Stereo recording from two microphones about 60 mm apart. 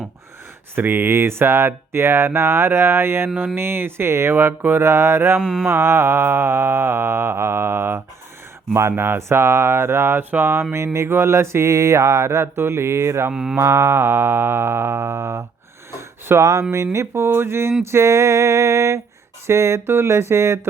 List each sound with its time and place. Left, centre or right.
0.8 s speech: right
5.4 s mantra: centre
5.6 s speech: right
13.3 s mantra: centre
13.6 s speech: right
15.9 s a sound: right
16.7 s speech: right
17.9 s a sound: right
19.5 s speech: right